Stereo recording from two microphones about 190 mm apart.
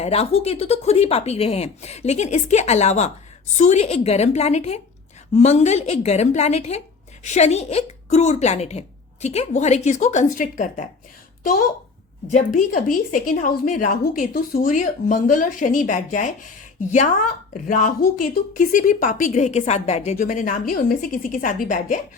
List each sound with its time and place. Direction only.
0.0 s speech: 30° left (ahead or behind)
12.3 s a woman's voice: 40° left (ahead or behind)
17.5 s a woman's voice: 45° left (ahead or behind)